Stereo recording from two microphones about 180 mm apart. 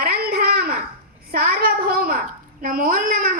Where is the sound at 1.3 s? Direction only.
55° right (ahead or behind).